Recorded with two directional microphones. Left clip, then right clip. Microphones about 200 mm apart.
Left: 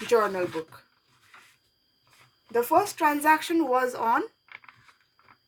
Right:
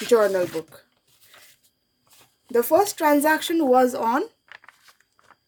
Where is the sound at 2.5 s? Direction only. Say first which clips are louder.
Right 4 dB; 40° right (ahead or behind).